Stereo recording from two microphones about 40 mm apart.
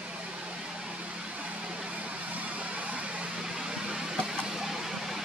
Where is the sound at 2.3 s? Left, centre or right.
Right.